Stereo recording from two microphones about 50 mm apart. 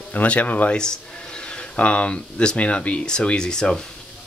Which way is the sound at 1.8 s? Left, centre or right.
Left.